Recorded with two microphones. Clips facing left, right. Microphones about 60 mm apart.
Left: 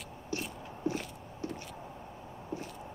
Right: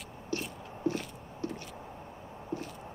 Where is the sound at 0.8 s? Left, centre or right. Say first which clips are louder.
Right 2 dB; left.